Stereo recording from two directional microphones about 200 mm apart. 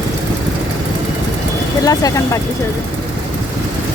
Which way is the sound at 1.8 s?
20° left (ahead or behind).